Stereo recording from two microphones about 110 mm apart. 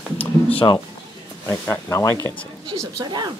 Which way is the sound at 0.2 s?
60° left (ahead or behind).